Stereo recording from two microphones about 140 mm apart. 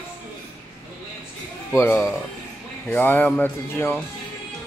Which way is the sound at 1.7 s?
20° left (ahead or behind).